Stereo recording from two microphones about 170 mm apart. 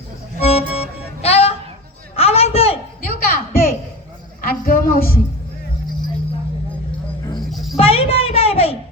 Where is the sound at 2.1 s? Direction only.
35° left (ahead or behind).